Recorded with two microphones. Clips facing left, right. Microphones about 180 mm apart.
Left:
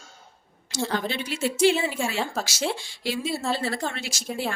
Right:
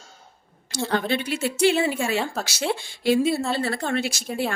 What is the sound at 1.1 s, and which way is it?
Speech, 60° right (ahead or behind).